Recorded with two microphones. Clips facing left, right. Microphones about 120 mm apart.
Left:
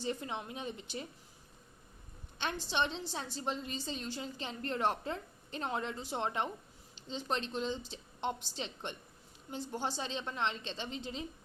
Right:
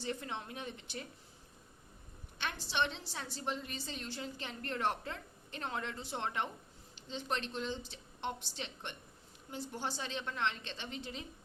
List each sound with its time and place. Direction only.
0.0 s speech: 15° left (ahead or behind)
2.6 s a woman's voice: 20° left (ahead or behind)